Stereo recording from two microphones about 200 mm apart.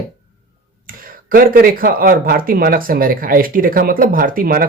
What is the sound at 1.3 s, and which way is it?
Speech, 45° right (ahead or behind).